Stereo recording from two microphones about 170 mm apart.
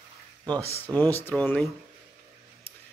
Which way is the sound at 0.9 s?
10° left (ahead or behind).